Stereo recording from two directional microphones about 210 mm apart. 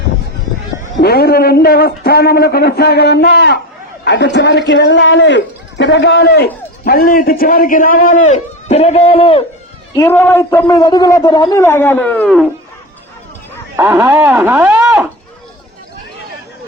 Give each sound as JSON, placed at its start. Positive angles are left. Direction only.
{"t": 0.9, "sound": "a man's voice", "side_deg": 50}
{"t": 9.9, "sound": "a man's voice", "side_deg": 10}
{"t": 13.7, "sound": "speech", "side_deg": -10}